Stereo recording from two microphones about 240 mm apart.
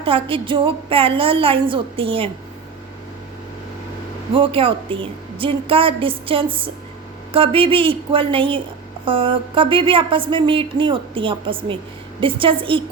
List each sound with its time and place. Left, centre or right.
0.0 s speech: right
4.4 s speech: right